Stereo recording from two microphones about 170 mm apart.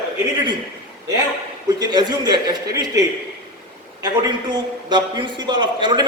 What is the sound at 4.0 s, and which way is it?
A man's voice, 25° right (ahead or behind).